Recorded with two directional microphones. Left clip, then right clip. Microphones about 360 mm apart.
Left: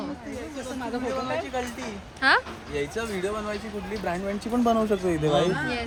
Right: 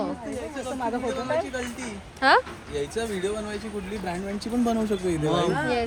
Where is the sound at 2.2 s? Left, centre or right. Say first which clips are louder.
Right 2 dB; centre.